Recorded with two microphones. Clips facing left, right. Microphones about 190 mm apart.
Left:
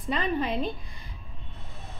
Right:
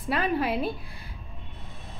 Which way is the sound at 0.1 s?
5° right (ahead or behind).